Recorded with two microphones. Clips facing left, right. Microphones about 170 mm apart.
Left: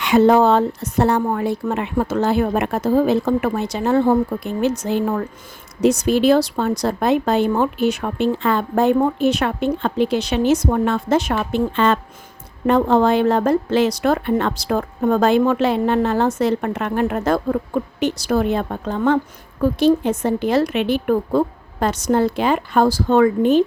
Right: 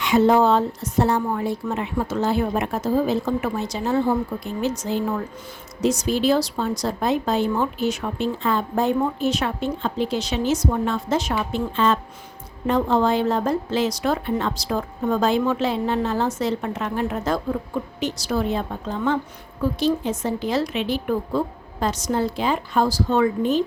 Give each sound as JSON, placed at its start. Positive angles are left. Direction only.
{"t": 0.0, "sound": "a woman's voice", "side_deg": 65}